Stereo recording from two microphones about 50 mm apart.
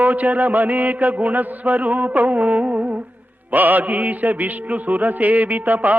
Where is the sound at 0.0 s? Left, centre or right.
Right.